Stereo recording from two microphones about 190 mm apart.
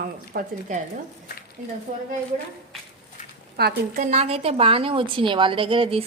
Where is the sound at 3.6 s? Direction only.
55° right (ahead or behind).